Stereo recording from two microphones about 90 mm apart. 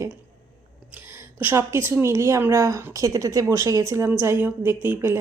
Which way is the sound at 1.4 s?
25° right (ahead or behind).